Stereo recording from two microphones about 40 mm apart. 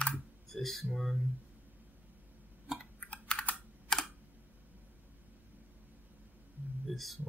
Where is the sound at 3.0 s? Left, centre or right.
Left.